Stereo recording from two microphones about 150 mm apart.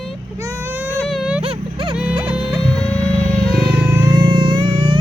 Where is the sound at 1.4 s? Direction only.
40° right (ahead or behind).